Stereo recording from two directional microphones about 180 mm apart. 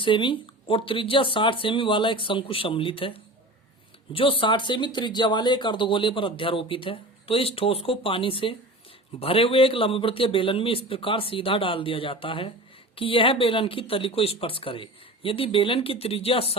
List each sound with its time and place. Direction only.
0.0 s speech: 25° left (ahead or behind)